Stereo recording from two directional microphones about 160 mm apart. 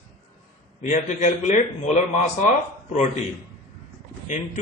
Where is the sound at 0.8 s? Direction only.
45° left (ahead or behind).